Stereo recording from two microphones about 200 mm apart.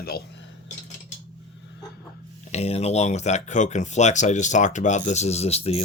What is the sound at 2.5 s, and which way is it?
Speech, 30° left (ahead or behind).